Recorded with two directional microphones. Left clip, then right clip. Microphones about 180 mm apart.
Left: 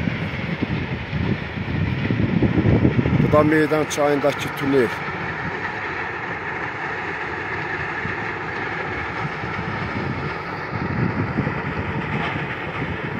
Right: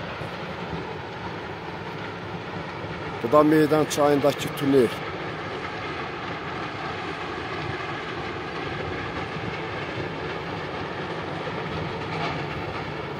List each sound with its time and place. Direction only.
3.3 s speech: centre (ahead or behind)